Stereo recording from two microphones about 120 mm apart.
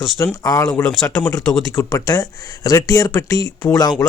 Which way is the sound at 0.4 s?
30° left (ahead or behind).